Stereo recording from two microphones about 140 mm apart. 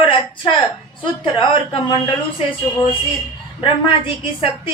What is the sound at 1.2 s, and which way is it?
Speech, 35° left (ahead or behind).